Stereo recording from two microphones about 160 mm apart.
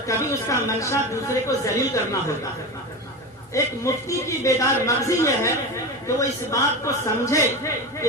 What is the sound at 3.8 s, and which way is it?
A woman's voice, 20° left (ahead or behind).